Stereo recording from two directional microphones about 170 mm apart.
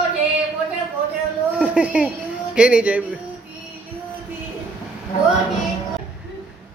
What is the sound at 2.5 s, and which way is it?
Speech, 5° right (ahead or behind).